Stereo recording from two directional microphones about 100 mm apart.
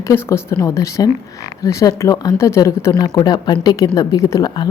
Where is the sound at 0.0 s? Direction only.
25° left (ahead or behind).